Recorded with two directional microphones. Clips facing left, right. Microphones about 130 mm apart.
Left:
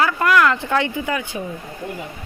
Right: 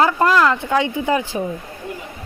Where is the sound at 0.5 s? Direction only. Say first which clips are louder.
Right 2 dB; 15° right (ahead or behind).